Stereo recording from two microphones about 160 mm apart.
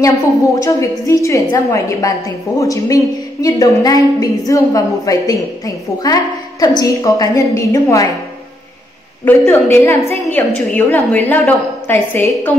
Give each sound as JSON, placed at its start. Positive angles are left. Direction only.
{"t": 0.7, "sound": "a woman's voice", "side_deg": 20}
{"t": 9.2, "sound": "a woman's voice", "side_deg": 15}